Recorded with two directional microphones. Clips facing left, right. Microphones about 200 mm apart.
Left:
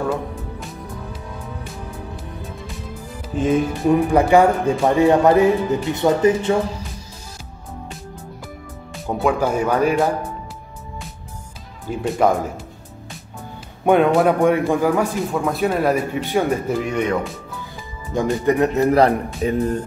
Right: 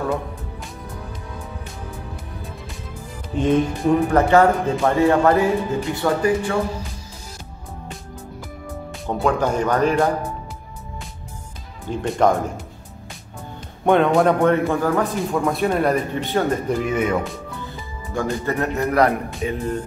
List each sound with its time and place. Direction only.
3.3 s speech: 5° left (ahead or behind); by 6.5 s 20° left (ahead or behind)
9.0 s speech: 5° left (ahead or behind)
11.9 s a man's voice: 5° left (ahead or behind)
13.8 s a man's voice: 5° left (ahead or behind)
18.1 s speech: 15° left (ahead or behind)
18.9 s speech: 30° left (ahead or behind)